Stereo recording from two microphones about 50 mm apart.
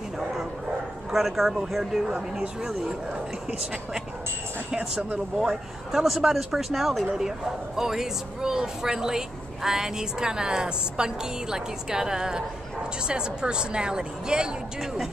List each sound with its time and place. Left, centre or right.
1.1 s speech: centre
4.6 s speech: centre